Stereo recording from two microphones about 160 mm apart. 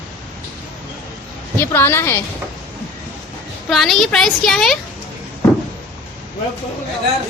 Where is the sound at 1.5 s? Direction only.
15° left (ahead or behind).